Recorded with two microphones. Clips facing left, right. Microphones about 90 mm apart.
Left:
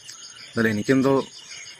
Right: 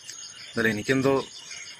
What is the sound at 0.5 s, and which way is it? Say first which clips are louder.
Speech: left 4 dB; 5° left (ahead or behind).